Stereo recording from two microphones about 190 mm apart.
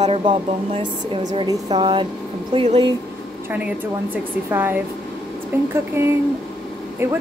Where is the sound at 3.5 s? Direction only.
10° right (ahead or behind).